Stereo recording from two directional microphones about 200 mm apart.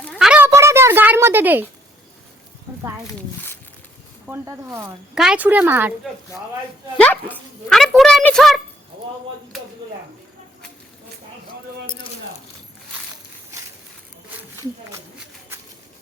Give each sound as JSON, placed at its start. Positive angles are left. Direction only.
{"t": 0.0, "sound": "a sound", "side_deg": 0}
{"t": 3.2, "sound": "a child's voice", "side_deg": 10}
{"t": 4.3, "sound": "speech", "side_deg": -15}
{"t": 6.9, "sound": "a child's voice", "side_deg": 5}
{"t": 14.5, "sound": "speech", "side_deg": -15}